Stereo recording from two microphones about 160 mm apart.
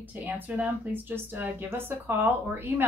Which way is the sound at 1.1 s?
15° right (ahead or behind).